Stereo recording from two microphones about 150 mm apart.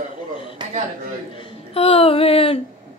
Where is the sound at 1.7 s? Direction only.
40° left (ahead or behind).